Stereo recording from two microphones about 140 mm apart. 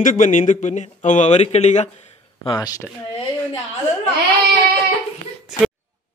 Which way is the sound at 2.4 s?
30° left (ahead or behind).